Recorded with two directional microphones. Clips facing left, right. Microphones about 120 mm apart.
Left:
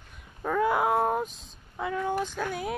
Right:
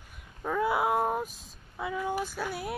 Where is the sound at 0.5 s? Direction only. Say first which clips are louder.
Left 2 dB; 5° right (ahead or behind).